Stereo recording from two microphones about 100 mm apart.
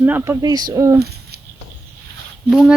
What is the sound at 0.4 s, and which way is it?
Speech, 40° right (ahead or behind).